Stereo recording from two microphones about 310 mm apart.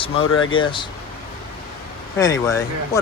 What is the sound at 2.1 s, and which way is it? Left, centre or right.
Speech, centre.